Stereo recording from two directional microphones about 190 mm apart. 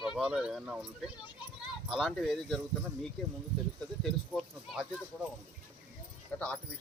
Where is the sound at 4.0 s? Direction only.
Centre (ahead or behind).